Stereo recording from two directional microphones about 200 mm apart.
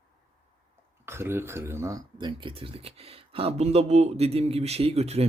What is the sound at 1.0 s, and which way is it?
Speech, 10° right (ahead or behind).